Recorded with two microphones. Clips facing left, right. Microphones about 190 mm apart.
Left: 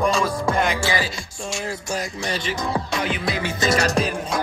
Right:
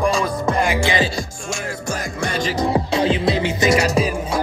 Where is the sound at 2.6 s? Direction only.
30° right (ahead or behind); by 4.1 s 5° right (ahead or behind).